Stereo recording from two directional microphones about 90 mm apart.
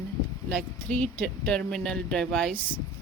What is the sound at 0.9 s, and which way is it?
Speech, 15° left (ahead or behind).